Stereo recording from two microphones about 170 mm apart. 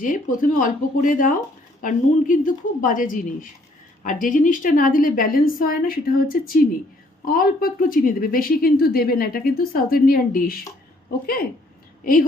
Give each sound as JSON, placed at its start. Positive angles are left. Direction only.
{"t": 0.0, "sound": "a woman's voice", "side_deg": 50}